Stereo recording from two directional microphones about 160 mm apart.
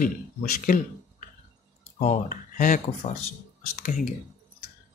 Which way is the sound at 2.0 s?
55° left (ahead or behind).